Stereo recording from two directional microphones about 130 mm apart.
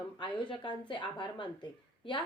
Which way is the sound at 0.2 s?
40° left (ahead or behind).